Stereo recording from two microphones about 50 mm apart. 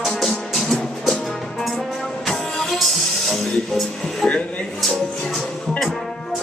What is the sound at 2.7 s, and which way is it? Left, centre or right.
Music, centre.